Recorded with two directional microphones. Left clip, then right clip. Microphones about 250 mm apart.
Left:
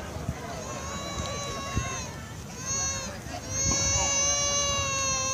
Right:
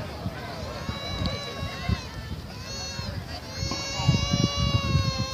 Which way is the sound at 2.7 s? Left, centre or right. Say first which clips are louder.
Left 4 dB; left.